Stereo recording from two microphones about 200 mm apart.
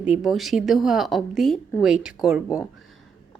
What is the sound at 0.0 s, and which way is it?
A woman's voice, 5° right (ahead or behind).